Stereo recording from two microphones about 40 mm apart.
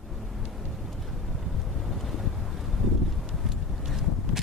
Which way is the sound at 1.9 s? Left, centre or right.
Centre.